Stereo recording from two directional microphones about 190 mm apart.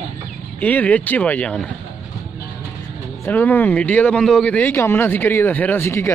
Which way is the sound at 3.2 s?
10° left (ahead or behind).